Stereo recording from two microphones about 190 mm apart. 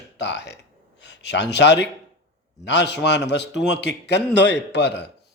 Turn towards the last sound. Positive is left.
turn(degrees=65)  # may be behind; listen again after turning